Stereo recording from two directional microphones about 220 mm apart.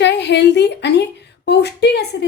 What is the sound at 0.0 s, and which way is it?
A woman's voice, 50° left (ahead or behind).